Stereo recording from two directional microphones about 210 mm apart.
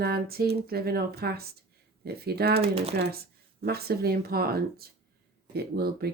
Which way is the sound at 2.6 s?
30° right (ahead or behind).